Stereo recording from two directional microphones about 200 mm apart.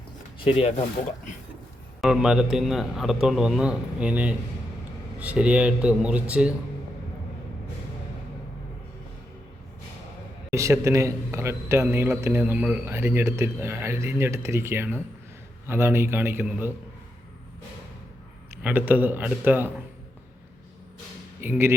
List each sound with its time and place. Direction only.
0.4 s speech: 30° left (ahead or behind)
2.0 s a man's voice: 5° right (ahead or behind)
10.5 s a man's voice: 15° right (ahead or behind)
18.6 s a man's voice: 10° right (ahead or behind)
21.4 s a man's voice: 10° right (ahead or behind)